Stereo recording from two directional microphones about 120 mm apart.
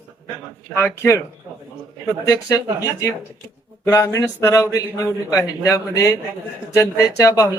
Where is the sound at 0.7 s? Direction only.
20° left (ahead or behind).